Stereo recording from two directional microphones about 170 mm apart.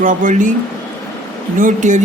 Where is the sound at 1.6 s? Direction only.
50° right (ahead or behind).